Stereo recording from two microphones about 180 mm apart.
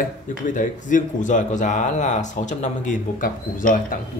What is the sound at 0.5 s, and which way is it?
Speech, 45° left (ahead or behind).